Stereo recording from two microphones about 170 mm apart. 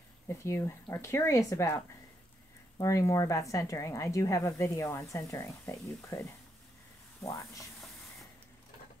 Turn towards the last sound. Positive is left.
turn(degrees=15)  # may be behind; listen again after turning